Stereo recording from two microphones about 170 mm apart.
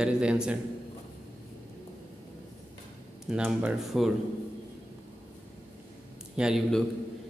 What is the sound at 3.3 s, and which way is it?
Speech, 5° right (ahead or behind).